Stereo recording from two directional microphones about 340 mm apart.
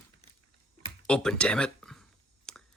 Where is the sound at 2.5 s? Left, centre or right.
Centre.